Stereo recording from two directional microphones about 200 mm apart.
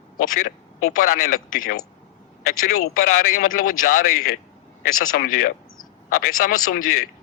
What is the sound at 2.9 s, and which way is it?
A man's voice, 45° left (ahead or behind).